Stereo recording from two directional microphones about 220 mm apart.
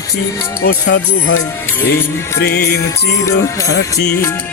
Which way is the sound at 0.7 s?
55° left (ahead or behind).